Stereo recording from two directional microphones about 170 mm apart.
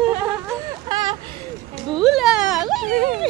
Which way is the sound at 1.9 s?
Centre (ahead or behind).